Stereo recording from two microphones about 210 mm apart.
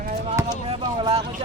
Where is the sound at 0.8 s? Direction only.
20° right (ahead or behind).